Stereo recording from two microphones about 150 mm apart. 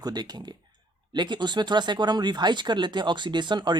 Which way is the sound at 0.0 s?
25° right (ahead or behind).